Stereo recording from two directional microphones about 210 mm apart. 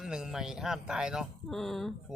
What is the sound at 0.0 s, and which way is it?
Speech, centre (ahead or behind).